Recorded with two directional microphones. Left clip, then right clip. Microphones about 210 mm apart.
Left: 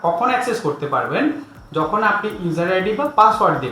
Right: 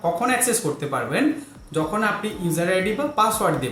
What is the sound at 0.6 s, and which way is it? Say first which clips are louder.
Speech: left 4 dB; 25° right (ahead or behind).